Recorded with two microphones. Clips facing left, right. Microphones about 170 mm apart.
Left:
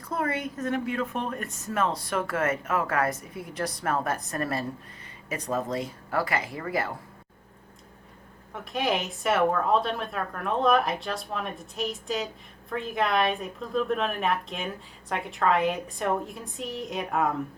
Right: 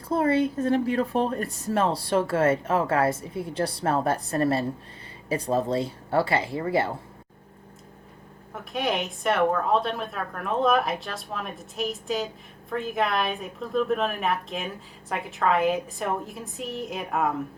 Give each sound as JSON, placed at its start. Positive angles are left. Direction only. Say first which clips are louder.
{"t": 0.1, "sound": "speech", "louder": "right 7 dB", "side_deg": -30}
{"t": 8.5, "sound": "speech", "louder": "even", "side_deg": 0}